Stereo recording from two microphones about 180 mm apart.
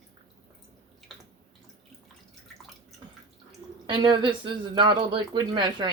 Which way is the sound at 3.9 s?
25° right (ahead or behind).